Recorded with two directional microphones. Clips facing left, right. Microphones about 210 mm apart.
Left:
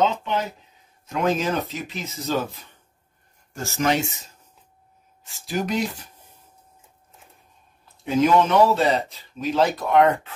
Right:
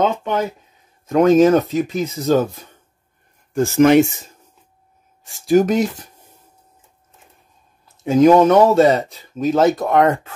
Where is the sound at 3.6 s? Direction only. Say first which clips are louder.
Right 12 dB; 55° right (ahead or behind).